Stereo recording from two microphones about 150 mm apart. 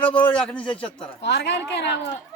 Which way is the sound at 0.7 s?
35° left (ahead or behind).